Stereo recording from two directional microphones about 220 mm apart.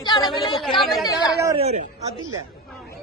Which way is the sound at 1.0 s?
15° left (ahead or behind).